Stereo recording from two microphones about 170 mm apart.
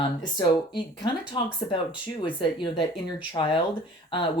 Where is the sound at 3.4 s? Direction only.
30° left (ahead or behind).